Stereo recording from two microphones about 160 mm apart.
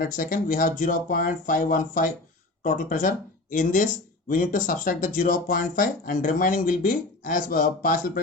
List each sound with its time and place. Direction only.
0.0 s speech: 60° left (ahead or behind)